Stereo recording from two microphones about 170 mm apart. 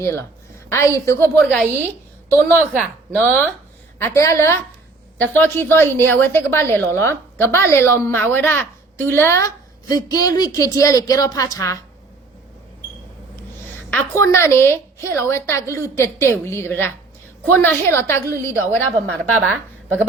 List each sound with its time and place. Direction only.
0.0 s a woman's voice: 15° left (ahead or behind)
2.3 s a woman's voice: 5° left (ahead or behind)
13.9 s a woman's voice: 15° left (ahead or behind)
19.4 s a woman's voice: centre (ahead or behind)